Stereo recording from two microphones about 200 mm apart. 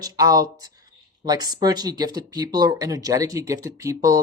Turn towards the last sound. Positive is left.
turn(degrees=-15)  # may be behind; listen again after turning